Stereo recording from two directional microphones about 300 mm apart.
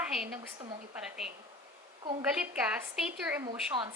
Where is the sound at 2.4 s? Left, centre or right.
Centre.